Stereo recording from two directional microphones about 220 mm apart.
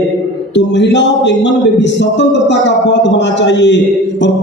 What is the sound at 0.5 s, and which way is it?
Speech, 55° left (ahead or behind).